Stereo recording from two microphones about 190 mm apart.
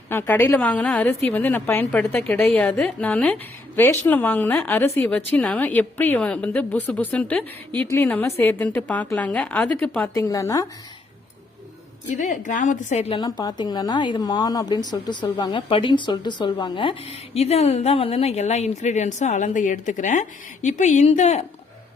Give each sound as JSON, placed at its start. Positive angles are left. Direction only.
{"t": 0.1, "sound": "a woman's voice", "side_deg": 10}
{"t": 12.1, "sound": "a woman's voice", "side_deg": 40}